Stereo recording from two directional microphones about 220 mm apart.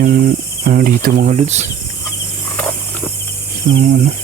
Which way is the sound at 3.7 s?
45° right (ahead or behind).